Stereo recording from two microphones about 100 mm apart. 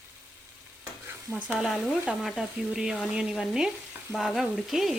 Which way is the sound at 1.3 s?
15° right (ahead or behind).